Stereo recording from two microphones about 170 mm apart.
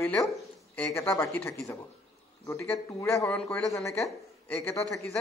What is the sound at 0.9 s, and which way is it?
Speech, 15° left (ahead or behind).